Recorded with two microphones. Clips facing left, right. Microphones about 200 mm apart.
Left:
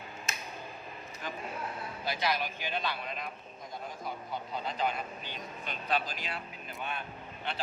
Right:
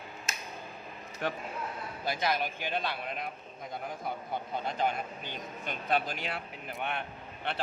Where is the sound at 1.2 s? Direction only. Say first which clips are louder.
Right 7 dB; 65° right (ahead or behind).